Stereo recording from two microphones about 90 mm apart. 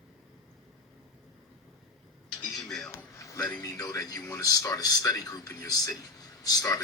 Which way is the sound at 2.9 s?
35° left (ahead or behind).